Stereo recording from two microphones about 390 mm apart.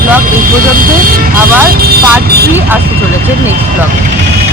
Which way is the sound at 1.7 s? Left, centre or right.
Right.